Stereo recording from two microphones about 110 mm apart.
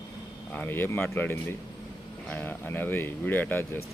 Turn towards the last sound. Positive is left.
turn(degrees=20)  # may be behind; listen again after turning